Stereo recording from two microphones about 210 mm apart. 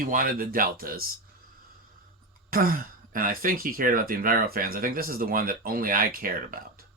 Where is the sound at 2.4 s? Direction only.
40° right (ahead or behind).